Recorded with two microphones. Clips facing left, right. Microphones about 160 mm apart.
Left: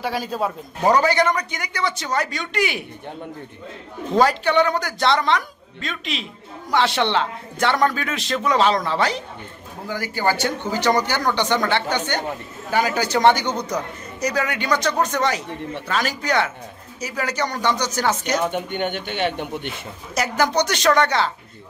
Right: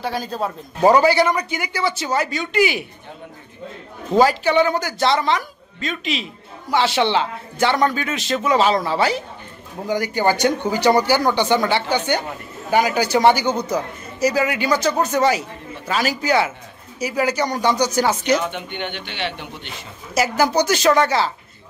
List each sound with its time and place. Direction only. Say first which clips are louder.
0.0 s speech: even; 5° left (ahead or behind)
0.8 s a man's voice: right 3 dB; 10° right (ahead or behind)
4.1 s speech: right 2 dB; 5° right (ahead or behind)
9.8 s a man's voice: right 4 dB; 20° right (ahead or behind)
18.5 s speech: left 4 dB; 45° left (ahead or behind)
20.2 s speech: right 3 dB; 5° right (ahead or behind)